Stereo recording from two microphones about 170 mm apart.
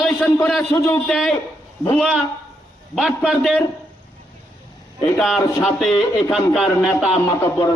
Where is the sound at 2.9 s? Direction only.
5° right (ahead or behind).